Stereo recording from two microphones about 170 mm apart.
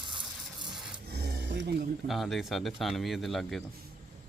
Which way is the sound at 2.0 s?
Centre (ahead or behind).